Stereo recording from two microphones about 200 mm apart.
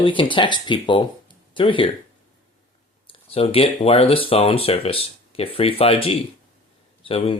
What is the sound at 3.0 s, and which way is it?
Speech, 30° left (ahead or behind).